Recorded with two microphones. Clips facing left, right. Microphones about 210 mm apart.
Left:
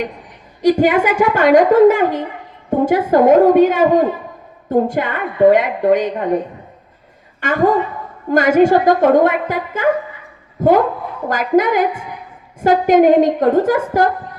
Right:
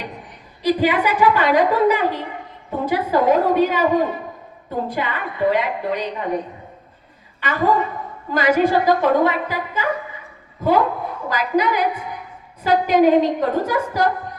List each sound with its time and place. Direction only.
0.6 s a woman's voice: 45° left (ahead or behind)
7.4 s a woman's voice: 50° left (ahead or behind)
11.3 s a woman's voice: 50° left (ahead or behind)